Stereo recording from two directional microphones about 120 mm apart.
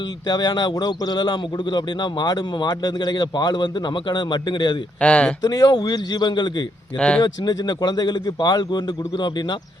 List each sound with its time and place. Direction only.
0.3 s a man's voice: 35° left (ahead or behind)
4.9 s speech: 10° left (ahead or behind)
5.4 s a man's voice: 35° left (ahead or behind)